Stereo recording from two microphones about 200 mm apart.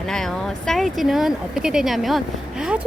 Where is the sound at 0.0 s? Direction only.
Centre (ahead or behind).